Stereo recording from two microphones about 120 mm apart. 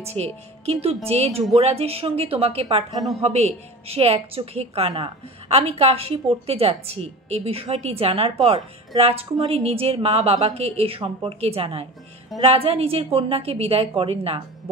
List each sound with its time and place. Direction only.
0.0 s a woman's voice: 60° right (ahead or behind)